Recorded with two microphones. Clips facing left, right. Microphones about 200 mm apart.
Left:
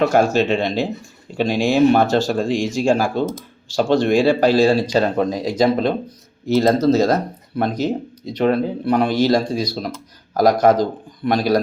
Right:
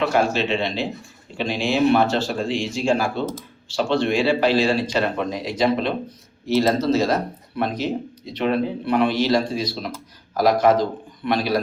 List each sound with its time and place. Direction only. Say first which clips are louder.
0.0 s speech: left 5 dB; 45° left (ahead or behind)